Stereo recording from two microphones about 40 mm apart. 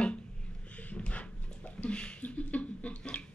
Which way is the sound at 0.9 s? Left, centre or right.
Left.